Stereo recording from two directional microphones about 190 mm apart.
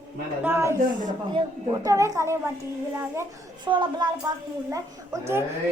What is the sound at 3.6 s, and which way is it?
A woman's voice, 25° right (ahead or behind).